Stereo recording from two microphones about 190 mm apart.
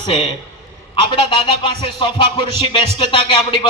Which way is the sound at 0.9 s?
25° left (ahead or behind).